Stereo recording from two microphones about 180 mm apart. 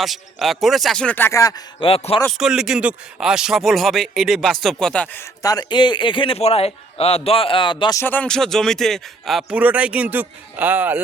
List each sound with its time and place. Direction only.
0.0 s speech: centre (ahead or behind); by 2.2 s 30° left (ahead or behind)
2.4 s speech: 5° right (ahead or behind)
5.4 s speech: 20° left (ahead or behind)
8.0 s speech: 10° left (ahead or behind); by 11.0 s 10° right (ahead or behind)